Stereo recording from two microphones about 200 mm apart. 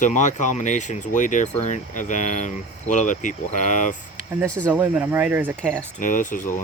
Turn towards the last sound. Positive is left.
turn(degrees=40)  # may be behind; listen again after turning